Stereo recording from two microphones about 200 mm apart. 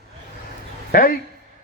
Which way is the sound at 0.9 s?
45° left (ahead or behind).